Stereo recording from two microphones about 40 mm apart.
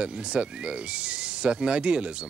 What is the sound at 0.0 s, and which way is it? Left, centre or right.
Speech, right.